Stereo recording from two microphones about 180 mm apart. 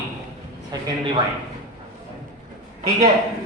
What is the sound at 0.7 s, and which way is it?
Speech, 25° right (ahead or behind).